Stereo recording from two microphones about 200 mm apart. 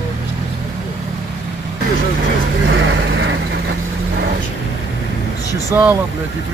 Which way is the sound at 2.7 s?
65° right (ahead or behind).